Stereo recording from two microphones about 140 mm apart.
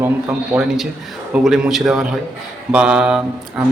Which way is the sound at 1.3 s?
5° right (ahead or behind).